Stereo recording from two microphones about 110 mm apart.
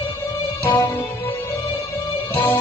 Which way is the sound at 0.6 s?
30° left (ahead or behind).